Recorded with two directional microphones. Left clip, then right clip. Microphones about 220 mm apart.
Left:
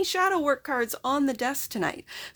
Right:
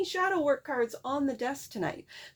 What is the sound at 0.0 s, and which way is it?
Speech, 35° left (ahead or behind).